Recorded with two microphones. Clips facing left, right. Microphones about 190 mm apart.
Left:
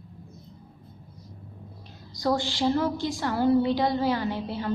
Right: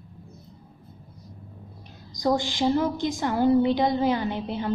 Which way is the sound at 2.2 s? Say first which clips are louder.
Right 2 dB; 15° right (ahead or behind).